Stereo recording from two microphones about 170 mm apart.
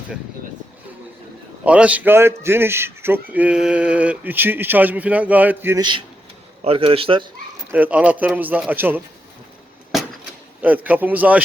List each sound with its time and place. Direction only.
1.6 s a man's voice: 5° right (ahead or behind)
6.7 s a man's voice: 35° right (ahead or behind)
7.7 s a man's voice: 10° right (ahead or behind)
10.6 s a man's voice: 10° right (ahead or behind)